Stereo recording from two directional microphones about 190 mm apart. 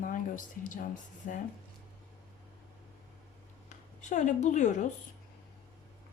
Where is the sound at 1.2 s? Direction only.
40° left (ahead or behind).